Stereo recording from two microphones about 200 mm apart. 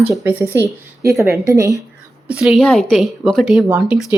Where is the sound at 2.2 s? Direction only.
Centre (ahead or behind).